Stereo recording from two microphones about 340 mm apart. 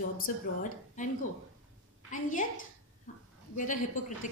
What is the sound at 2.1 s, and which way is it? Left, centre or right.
Speech, left.